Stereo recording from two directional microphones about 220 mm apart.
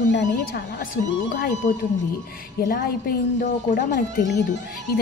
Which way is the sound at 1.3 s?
45° left (ahead or behind).